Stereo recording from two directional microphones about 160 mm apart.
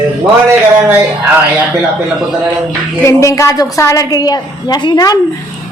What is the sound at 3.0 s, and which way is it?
A woman's voice, 20° left (ahead or behind).